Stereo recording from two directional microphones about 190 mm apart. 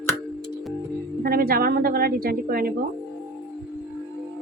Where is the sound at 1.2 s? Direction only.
50° right (ahead or behind).